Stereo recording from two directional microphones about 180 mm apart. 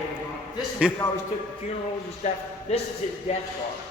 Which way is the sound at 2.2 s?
40° left (ahead or behind).